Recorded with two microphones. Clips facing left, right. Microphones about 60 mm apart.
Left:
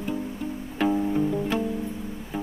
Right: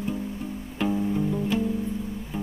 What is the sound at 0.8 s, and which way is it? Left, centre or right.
Music, left.